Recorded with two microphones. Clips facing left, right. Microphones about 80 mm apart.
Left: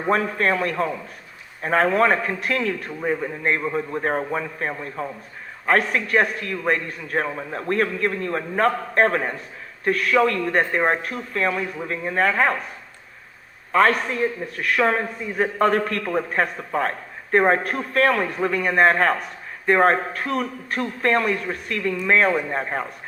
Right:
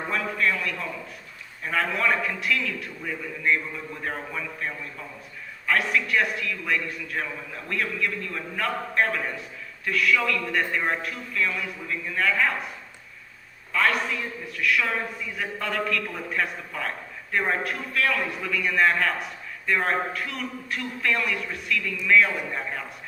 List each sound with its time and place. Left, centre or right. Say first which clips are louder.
0.1 s a man's voice: left 6 dB; left
13.7 s a man's voice: left 6 dB; left